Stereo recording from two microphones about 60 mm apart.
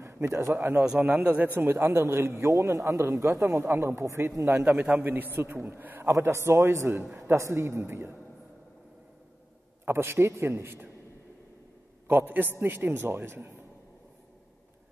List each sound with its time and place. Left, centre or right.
0.0 s a man's voice: right
1.1 s a man's voice: right
1.6 s a man's voice: right
2.5 s a man's voice: right
4.7 s a man's voice: right
7.0 s a man's voice: right
7.3 s a man's voice: right
9.8 s a man's voice: right
12.1 s a man's voice: right